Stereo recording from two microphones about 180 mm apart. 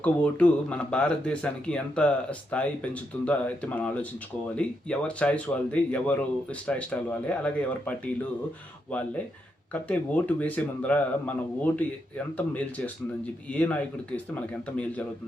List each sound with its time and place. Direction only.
0.0 s speech: 10° left (ahead or behind)